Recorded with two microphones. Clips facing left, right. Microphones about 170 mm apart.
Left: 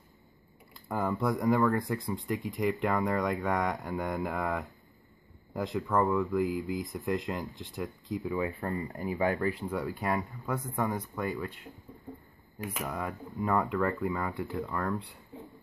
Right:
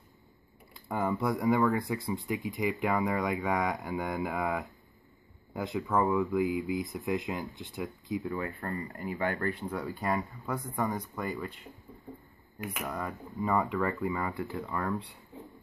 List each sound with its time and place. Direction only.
0.7 s speech: centre (ahead or behind)
8.4 s speech: 15° left (ahead or behind)
9.4 s speech: 5° left (ahead or behind)
12.8 s speech: centre (ahead or behind)